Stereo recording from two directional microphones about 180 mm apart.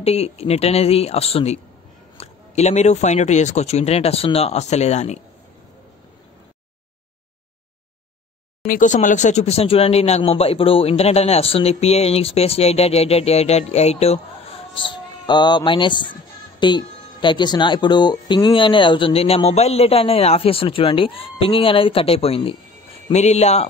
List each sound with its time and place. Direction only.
0.0 s speech: 35° left (ahead or behind)
8.6 s speech: 45° left (ahead or behind)